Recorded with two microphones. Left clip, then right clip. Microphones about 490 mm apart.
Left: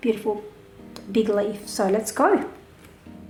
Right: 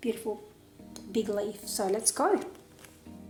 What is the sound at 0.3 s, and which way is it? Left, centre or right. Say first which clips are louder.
A woman's voice: left 9 dB; right.